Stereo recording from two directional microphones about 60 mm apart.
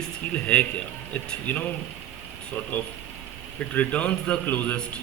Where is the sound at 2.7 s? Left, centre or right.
Left.